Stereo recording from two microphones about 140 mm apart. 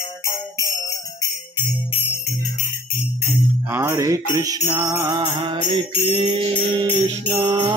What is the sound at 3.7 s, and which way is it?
Music, 20° right (ahead or behind).